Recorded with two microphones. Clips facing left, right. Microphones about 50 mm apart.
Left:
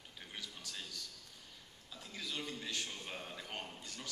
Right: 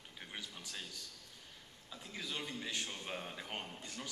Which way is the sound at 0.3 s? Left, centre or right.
Centre.